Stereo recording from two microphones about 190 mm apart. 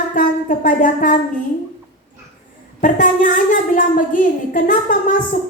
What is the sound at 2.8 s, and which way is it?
A child's voice, 45° left (ahead or behind).